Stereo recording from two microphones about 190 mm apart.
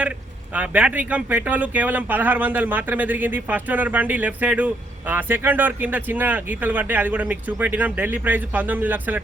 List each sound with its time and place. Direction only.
0.5 s speech: 10° right (ahead or behind)